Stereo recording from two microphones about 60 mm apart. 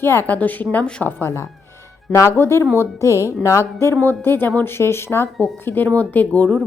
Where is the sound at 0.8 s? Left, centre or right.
Centre.